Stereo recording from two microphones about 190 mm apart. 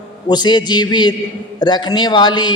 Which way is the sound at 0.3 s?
20° left (ahead or behind).